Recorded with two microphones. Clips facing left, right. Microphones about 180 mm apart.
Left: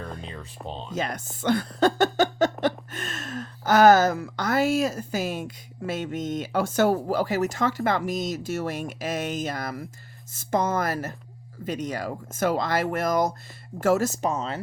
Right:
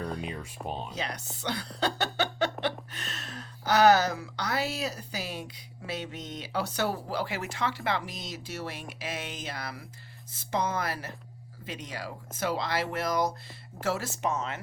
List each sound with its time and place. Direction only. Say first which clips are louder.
0.2 s speech: right 1 dB; 15° right (ahead or behind)
0.9 s speech: left 6 dB; 50° left (ahead or behind); by 14.6 s 35° left (ahead or behind)